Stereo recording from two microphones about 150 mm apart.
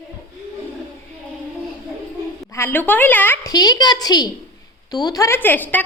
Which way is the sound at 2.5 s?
15° left (ahead or behind).